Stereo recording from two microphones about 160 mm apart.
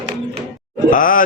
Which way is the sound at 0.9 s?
55° left (ahead or behind).